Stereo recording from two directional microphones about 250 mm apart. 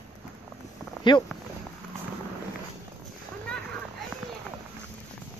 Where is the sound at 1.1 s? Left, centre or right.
Centre.